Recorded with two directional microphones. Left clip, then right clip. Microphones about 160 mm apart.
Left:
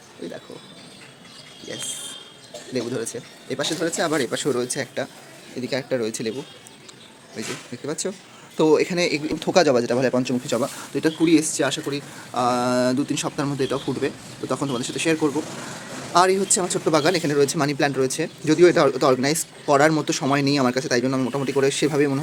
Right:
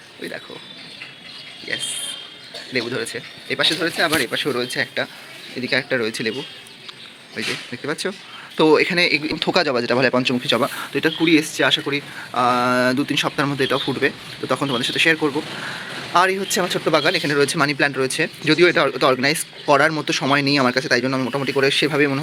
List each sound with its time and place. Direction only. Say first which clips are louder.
2.9 s speech: right 3 dB; 10° right (ahead or behind)
3.5 s speech: right 5 dB; 15° left (ahead or behind)
5.5 s speech: right 4 dB; 5° left (ahead or behind)
7.4 s speech: right 6 dB; centre (ahead or behind)
17.2 s speech: right 2 dB; 5° left (ahead or behind)